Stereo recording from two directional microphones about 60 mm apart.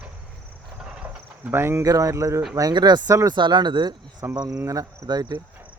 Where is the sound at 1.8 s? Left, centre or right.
Right.